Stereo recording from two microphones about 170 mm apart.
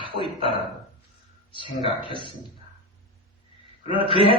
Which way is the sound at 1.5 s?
30° left (ahead or behind).